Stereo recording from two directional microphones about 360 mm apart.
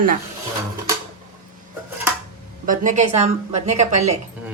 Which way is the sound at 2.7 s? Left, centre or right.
Right.